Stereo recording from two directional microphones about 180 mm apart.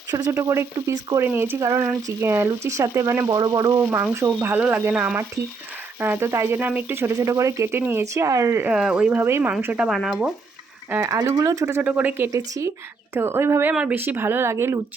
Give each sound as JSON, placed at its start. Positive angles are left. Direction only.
{"t": 0.1, "sound": "speech", "side_deg": -20}